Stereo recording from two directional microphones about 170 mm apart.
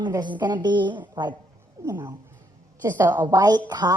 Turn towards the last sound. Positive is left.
turn(degrees=-25)  # may be behind; listen again after turning